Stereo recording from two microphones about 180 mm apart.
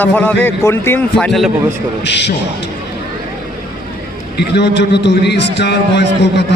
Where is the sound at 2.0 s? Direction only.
75° left (ahead or behind).